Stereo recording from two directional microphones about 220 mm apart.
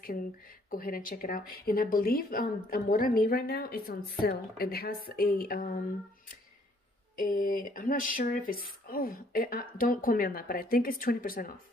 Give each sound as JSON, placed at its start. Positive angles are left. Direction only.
{"t": 0.7, "sound": "speech", "side_deg": 40}
{"t": 7.2, "sound": "speech", "side_deg": 40}